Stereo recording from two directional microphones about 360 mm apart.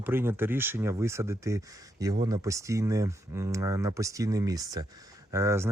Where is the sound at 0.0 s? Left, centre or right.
Centre.